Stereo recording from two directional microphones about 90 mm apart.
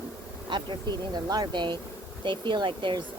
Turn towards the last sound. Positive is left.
turn(degrees=-65)  # may be behind; listen again after turning